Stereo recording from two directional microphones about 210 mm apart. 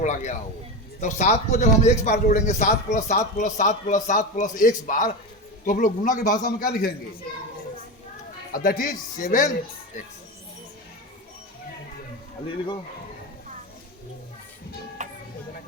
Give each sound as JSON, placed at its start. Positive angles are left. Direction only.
{"t": 0.0, "sound": "speech", "side_deg": 35}
{"t": 8.5, "sound": "speech", "side_deg": 45}
{"t": 15.0, "sound": "music", "side_deg": -35}